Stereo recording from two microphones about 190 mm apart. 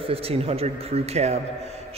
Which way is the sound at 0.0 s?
30° right (ahead or behind).